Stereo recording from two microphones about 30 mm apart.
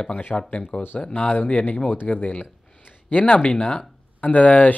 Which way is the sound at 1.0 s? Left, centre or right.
Left.